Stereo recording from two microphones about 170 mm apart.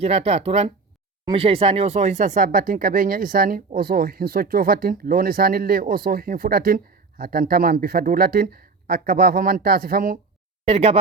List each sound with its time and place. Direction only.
0.0 s speech: 35° right (ahead or behind); by 10.2 s 60° right (ahead or behind)
10.7 s speech: 35° right (ahead or behind)